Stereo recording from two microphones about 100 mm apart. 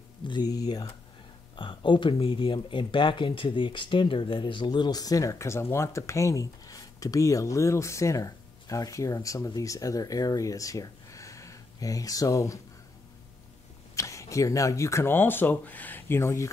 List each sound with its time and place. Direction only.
0.3 s speech: 40° left (ahead or behind)
1.6 s speech: 55° left (ahead or behind); by 12.5 s 35° left (ahead or behind)
13.9 s speech: 30° left (ahead or behind)